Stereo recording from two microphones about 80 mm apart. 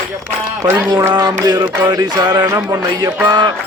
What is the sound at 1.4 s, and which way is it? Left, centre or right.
Music, right.